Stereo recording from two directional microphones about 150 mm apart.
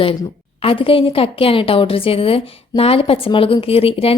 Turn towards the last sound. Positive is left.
turn(degrees=40)  # may be behind; listen again after turning